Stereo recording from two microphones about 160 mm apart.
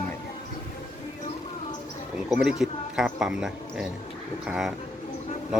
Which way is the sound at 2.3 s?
5° right (ahead or behind).